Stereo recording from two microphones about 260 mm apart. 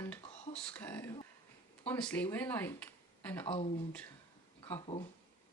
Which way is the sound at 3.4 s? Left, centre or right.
Left.